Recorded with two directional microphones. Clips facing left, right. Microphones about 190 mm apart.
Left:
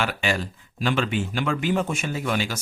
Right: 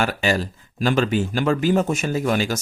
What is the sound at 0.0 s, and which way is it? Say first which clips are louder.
Speech: right 4 dB; 40° right (ahead or behind).